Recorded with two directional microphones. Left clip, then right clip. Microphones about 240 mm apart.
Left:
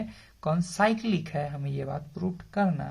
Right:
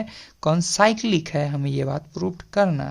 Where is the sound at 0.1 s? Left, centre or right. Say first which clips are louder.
Right 9 dB; right.